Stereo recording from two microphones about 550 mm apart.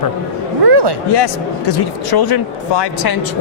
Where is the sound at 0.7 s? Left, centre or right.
Right.